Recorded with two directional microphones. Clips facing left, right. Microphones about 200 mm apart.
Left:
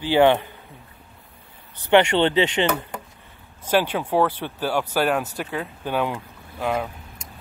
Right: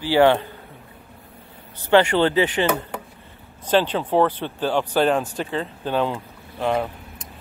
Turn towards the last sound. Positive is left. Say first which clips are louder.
# right 3 dB
turn(degrees=5)  # may be behind; listen again after turning